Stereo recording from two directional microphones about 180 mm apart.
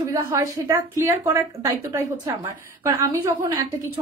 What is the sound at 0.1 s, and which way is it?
A woman's voice, 20° right (ahead or behind).